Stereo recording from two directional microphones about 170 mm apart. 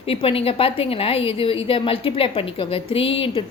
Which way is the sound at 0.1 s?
35° left (ahead or behind).